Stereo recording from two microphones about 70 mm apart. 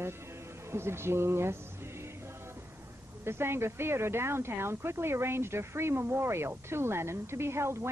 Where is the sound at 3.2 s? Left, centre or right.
Right.